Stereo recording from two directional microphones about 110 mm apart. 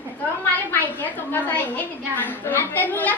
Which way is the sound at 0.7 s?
15° left (ahead or behind).